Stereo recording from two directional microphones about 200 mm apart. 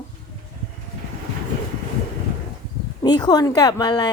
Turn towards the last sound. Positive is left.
turn(degrees=20)  # may be behind; listen again after turning